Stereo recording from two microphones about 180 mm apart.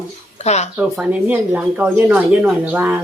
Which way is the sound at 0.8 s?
10° right (ahead or behind).